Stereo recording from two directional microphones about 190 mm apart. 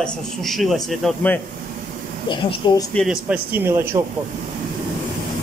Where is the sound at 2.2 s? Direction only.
25° left (ahead or behind).